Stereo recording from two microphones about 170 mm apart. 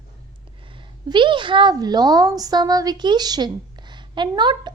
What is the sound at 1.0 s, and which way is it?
A woman's voice, 25° right (ahead or behind).